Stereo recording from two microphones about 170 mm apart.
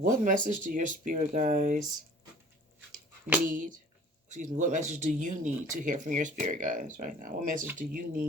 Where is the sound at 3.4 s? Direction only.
50° right (ahead or behind).